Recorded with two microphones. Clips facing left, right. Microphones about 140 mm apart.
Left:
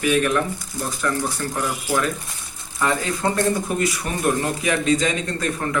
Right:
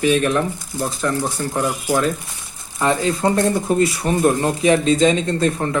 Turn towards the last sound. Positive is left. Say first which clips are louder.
# right 8 dB
turn(degrees=-25)  # may be behind; listen again after turning